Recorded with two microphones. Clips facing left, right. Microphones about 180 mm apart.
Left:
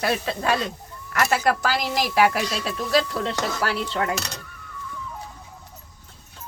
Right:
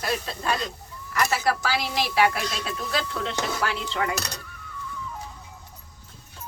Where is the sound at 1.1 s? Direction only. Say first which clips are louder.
Left 3 dB; 55° left (ahead or behind); by 3.5 s 35° left (ahead or behind).